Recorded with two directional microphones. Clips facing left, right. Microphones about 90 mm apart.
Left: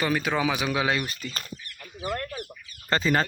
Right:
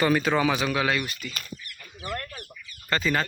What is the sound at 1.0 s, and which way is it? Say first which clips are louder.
Speech: left 1 dB; 35° left (ahead or behind).